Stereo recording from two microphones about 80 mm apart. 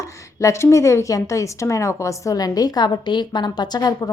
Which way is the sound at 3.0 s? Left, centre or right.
Left.